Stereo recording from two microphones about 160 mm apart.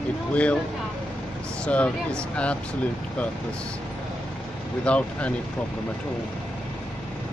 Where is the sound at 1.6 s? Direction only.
5° left (ahead or behind).